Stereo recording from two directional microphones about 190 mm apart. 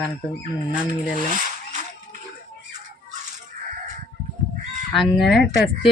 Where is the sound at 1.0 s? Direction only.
45° left (ahead or behind).